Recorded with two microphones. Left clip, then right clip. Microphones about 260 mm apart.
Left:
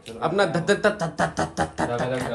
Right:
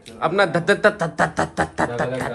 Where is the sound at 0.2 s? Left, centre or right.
Centre.